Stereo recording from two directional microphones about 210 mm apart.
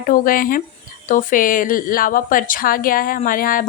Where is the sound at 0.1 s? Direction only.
40° left (ahead or behind).